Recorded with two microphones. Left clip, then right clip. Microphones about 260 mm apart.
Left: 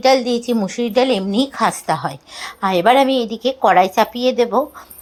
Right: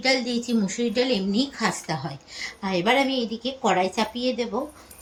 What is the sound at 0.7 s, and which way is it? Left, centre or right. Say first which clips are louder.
A woman's voice: left 8 dB; left.